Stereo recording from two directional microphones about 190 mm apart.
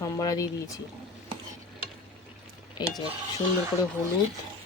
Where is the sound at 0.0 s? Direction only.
20° left (ahead or behind).